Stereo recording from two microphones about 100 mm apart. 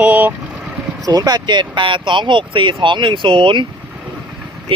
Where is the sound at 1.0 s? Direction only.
40° right (ahead or behind).